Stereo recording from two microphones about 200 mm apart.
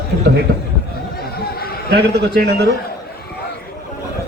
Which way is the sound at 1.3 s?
50° left (ahead or behind).